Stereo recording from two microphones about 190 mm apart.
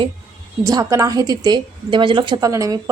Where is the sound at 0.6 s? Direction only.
20° right (ahead or behind).